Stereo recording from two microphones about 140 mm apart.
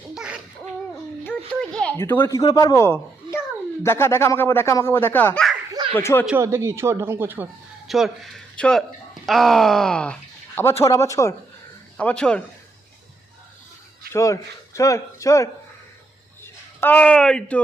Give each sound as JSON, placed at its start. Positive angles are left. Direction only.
{"t": 0.1, "sound": "babbling", "side_deg": -5}
{"t": 1.7, "sound": "a sound", "side_deg": 5}
{"t": 2.0, "sound": "speech", "side_deg": 15}
{"t": 2.4, "sound": "speech", "side_deg": 25}
{"t": 6.3, "sound": "speech", "side_deg": -20}
{"t": 7.9, "sound": "speech", "side_deg": 0}
{"t": 11.9, "sound": "speech", "side_deg": 10}
{"t": 14.1, "sound": "speech", "side_deg": 20}